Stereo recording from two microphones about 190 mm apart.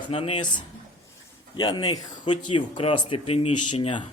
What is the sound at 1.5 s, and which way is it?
Speech, 25° left (ahead or behind).